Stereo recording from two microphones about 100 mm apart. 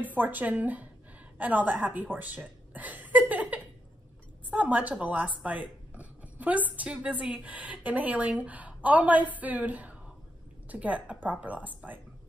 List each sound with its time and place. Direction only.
0.0 s a woman's voice: 15° right (ahead or behind)